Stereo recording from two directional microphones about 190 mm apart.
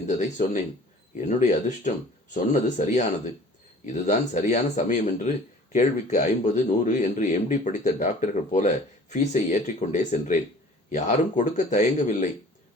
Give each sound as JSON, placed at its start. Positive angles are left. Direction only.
{"t": 0.0, "sound": "speech", "side_deg": 40}